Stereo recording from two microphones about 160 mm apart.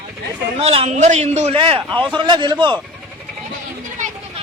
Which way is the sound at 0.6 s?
40° right (ahead or behind).